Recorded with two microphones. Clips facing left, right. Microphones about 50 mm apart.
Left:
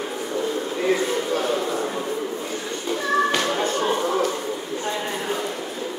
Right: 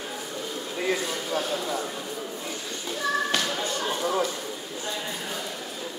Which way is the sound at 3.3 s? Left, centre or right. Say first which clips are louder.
Left 6 dB; left.